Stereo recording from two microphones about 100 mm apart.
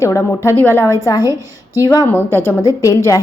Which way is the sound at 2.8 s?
35° left (ahead or behind).